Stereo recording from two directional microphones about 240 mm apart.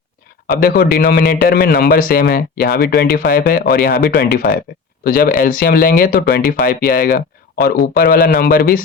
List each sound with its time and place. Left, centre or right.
0.6 s a man's voice: left